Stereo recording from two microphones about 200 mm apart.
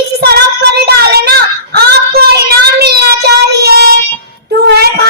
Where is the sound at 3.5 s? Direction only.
55° right (ahead or behind).